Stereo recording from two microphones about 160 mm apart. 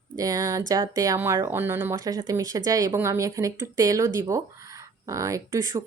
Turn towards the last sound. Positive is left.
turn(degrees=-20)  # may be behind; listen again after turning